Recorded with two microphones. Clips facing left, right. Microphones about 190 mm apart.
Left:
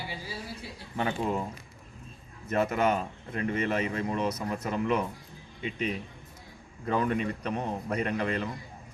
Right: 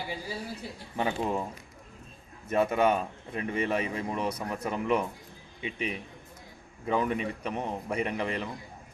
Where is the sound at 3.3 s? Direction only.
10° right (ahead or behind).